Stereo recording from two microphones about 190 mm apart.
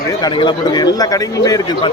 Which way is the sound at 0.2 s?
25° left (ahead or behind).